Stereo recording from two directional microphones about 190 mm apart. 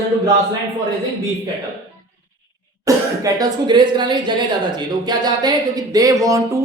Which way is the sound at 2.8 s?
20° right (ahead or behind).